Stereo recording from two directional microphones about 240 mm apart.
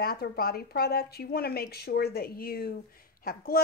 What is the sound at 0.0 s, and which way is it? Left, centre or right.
A woman's voice, left.